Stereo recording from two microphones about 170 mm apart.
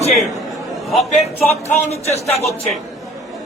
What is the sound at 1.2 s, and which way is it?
Speech, 40° left (ahead or behind).